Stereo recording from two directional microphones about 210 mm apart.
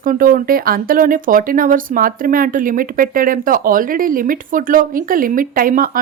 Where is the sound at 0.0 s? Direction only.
40° right (ahead or behind).